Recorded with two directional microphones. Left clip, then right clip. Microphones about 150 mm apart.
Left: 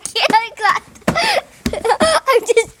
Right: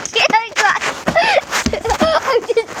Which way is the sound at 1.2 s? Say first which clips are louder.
Right 4 dB; 15° left (ahead or behind).